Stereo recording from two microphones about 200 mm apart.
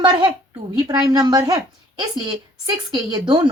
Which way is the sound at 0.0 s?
20° right (ahead or behind).